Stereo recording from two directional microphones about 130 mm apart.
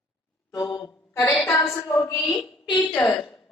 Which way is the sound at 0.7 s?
25° left (ahead or behind).